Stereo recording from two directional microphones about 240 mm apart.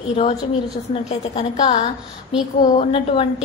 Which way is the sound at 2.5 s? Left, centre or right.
Left.